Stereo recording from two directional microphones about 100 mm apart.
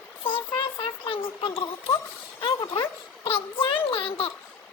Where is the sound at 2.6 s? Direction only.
50° left (ahead or behind); by 4.3 s 65° left (ahead or behind).